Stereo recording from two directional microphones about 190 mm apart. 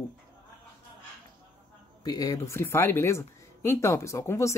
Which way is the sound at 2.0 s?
20° left (ahead or behind).